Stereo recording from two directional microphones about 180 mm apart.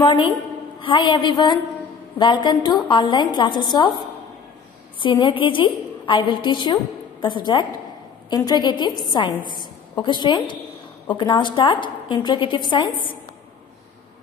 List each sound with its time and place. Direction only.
0.0 s a woman's voice: 25° left (ahead or behind)
5.0 s a woman's voice: 25° left (ahead or behind)